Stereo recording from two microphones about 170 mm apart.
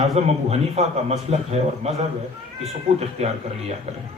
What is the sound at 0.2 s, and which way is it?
A man's voice, 40° right (ahead or behind).